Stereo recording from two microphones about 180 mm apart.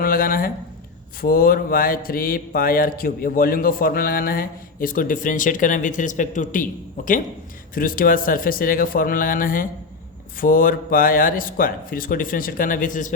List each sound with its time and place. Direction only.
0.0 s speech: 55° left (ahead or behind)